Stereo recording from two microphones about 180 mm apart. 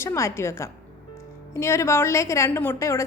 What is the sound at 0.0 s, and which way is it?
A woman's voice, 15° left (ahead or behind).